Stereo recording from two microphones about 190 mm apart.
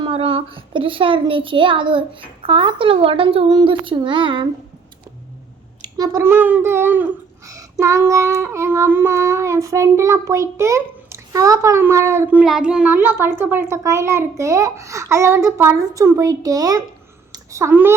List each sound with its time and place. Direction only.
0.0 s a child's voice: 30° right (ahead or behind)
5.8 s speech: 20° right (ahead or behind)